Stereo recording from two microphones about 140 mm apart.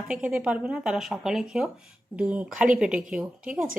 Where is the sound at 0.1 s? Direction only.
10° right (ahead or behind).